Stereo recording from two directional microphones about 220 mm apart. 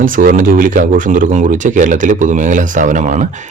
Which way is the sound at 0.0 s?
40° right (ahead or behind).